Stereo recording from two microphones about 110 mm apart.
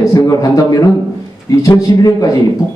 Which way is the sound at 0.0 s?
30° left (ahead or behind).